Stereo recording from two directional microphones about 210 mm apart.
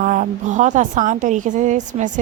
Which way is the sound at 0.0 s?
40° right (ahead or behind).